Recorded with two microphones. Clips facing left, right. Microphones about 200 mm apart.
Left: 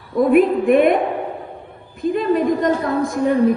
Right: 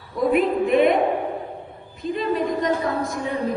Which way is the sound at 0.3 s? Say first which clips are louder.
Left 5 dB; 50° left (ahead or behind).